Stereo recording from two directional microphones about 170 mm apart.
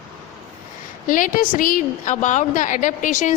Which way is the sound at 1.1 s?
50° left (ahead or behind).